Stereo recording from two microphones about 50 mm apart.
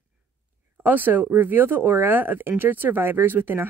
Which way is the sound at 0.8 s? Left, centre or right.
Right.